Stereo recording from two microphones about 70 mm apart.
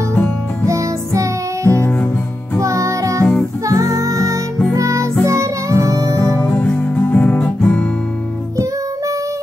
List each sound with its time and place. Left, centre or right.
0.7 s music: right
1.7 s music: left
2.6 s music: right
6.5 s music: left